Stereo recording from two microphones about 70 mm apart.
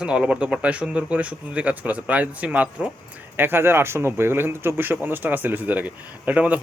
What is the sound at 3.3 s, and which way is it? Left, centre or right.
Speech, right.